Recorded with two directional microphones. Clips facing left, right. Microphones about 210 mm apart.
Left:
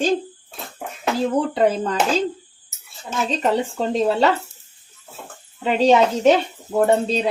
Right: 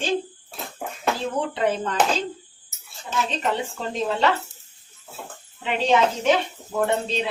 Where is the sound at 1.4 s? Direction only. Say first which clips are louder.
Left 7 dB; 40° left (ahead or behind).